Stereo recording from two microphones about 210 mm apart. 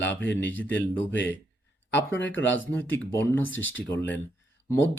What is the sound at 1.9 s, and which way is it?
Speech, 10° left (ahead or behind).